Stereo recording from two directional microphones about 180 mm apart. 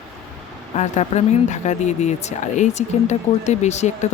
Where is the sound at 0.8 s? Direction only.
40° left (ahead or behind).